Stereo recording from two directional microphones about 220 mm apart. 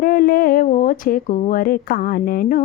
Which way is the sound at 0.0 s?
40° left (ahead or behind).